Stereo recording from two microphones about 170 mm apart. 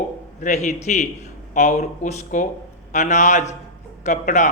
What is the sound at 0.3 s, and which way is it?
A man's voice, 45° left (ahead or behind).